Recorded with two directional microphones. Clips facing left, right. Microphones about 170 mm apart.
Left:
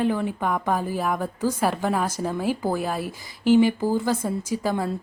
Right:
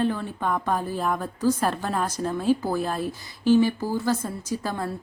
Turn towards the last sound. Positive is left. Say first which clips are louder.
# left 4 dB
turn(degrees=15)  # may be behind; listen again after turning